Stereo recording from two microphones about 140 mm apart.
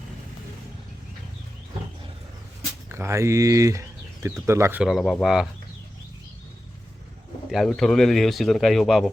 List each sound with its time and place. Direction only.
2.9 s speech: 20° right (ahead or behind)
4.8 s speech: centre (ahead or behind)
7.5 s speech: centre (ahead or behind)